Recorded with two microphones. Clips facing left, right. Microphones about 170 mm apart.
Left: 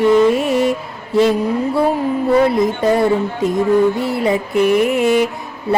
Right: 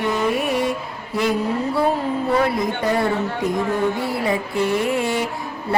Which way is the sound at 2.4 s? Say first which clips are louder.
Left 6 dB; 25° left (ahead or behind).